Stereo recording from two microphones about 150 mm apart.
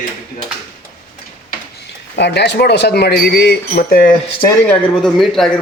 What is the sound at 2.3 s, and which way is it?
Speech, 90° left.